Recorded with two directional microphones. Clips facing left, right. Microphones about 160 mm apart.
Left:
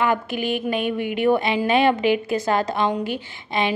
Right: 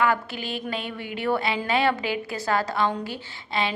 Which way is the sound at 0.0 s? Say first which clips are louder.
Left 3 dB; 20° left (ahead or behind).